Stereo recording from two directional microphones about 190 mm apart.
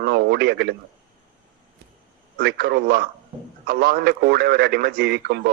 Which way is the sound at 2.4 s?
55° right (ahead or behind).